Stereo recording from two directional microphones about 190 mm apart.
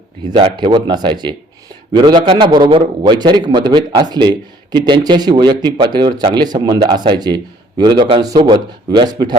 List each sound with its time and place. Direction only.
0.3 s a man's voice: 25° right (ahead or behind)